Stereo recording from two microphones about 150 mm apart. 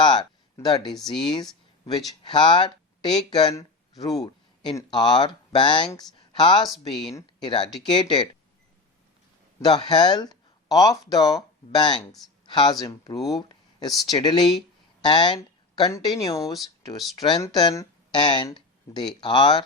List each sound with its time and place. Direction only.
0.0 s speech: 30° left (ahead or behind)
1.3 s a sound: 25° left (ahead or behind)
2.0 s speech: 30° left (ahead or behind)
6.6 s speech: centre (ahead or behind)
7.4 s speech: 30° left (ahead or behind)
9.6 s speech: 30° left (ahead or behind)